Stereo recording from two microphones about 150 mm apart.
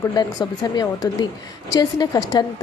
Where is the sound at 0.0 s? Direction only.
25° left (ahead or behind).